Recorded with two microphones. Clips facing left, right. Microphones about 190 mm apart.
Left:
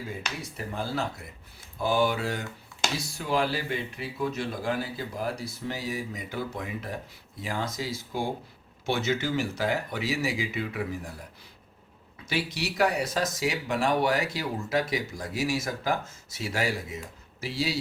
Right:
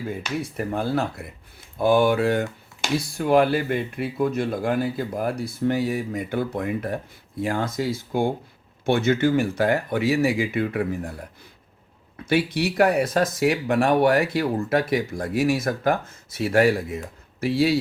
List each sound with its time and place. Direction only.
0.5 s speech: 55° right (ahead or behind)
12.1 s speech: 55° right (ahead or behind)